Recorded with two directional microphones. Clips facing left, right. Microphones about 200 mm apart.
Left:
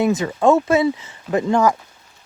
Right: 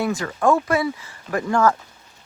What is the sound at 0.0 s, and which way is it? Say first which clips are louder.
Speech: left 4 dB; 20° left (ahead or behind).